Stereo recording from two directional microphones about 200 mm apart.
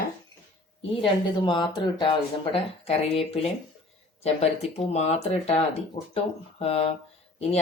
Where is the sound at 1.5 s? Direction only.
25° left (ahead or behind).